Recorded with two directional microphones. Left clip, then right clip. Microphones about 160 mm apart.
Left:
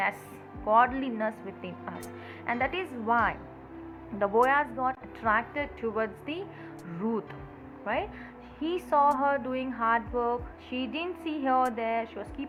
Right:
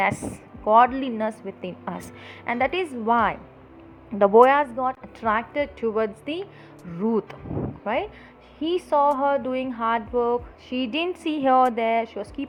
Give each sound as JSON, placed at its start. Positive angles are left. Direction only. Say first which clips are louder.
{"t": 0.0, "sound": "a woman's voice", "louder": "right 7 dB", "side_deg": -90}
{"t": 2.5, "sound": "a woman's voice", "louder": "right 6 dB", "side_deg": -70}
{"t": 7.1, "sound": "speech", "louder": "right 8 dB", "side_deg": -90}
{"t": 7.9, "sound": "a woman's voice", "louder": "right 5 dB", "side_deg": -65}
{"t": 8.5, "sound": "a woman's voice", "louder": "right 4 dB", "side_deg": -50}
{"t": 10.8, "sound": "a woman's voice", "louder": "right 8 dB", "side_deg": -80}